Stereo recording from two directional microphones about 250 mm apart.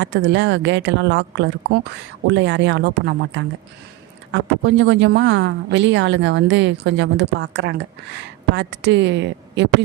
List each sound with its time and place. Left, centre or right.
0.0 s a woman's voice: right